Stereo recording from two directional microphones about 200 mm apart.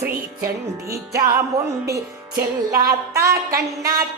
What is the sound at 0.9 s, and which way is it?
Speech, 15° right (ahead or behind).